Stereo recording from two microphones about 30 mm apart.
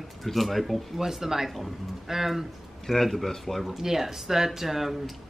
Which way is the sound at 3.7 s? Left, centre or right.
Centre.